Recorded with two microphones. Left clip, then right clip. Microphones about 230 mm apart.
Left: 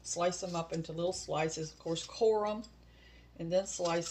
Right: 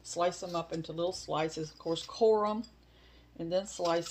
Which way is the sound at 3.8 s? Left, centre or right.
Right.